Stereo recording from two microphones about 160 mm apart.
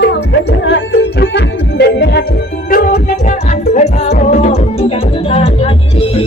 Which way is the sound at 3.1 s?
50° left (ahead or behind).